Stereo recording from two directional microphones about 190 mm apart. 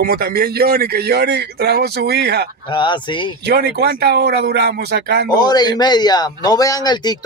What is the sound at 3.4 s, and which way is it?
A man's voice, 55° right (ahead or behind).